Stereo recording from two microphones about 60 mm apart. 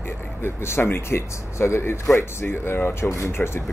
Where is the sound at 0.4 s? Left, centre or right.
Left.